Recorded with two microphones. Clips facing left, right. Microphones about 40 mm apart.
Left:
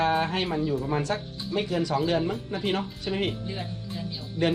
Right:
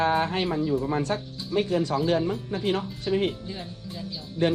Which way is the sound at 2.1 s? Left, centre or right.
Left.